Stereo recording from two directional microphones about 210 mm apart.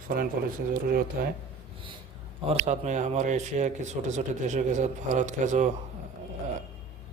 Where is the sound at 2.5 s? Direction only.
35° right (ahead or behind).